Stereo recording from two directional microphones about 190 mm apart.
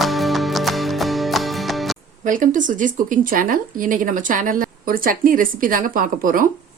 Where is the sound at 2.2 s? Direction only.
45° right (ahead or behind).